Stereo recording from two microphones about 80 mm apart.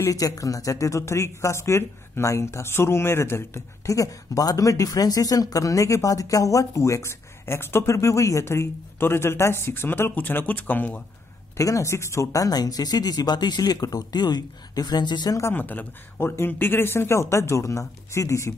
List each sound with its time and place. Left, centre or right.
0.1 s speech: left
11.5 s speech: left
15.5 s speech: left